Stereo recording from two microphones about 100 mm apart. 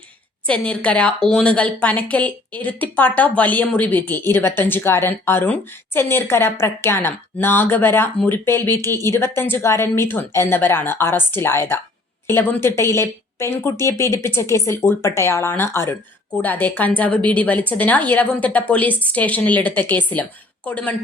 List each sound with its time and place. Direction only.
0.4 s a woman's voice: 10° left (ahead or behind)